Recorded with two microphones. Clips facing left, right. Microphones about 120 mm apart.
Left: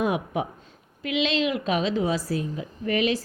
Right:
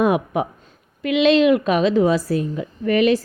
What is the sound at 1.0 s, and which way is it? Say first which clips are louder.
A woman's voice: right 10 dB; 60° right (ahead or behind).